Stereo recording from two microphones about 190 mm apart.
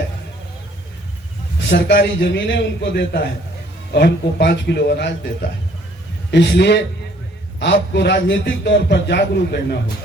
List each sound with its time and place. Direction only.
1.7 s a man's voice: 50° left (ahead or behind)
2.2 s a man's voice: 70° left (ahead or behind)